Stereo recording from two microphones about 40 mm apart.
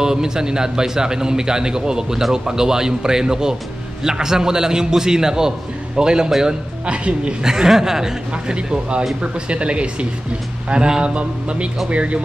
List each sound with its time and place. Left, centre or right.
0.0 s a man's voice: centre
7.4 s a man's voice: centre
8.3 s speech: right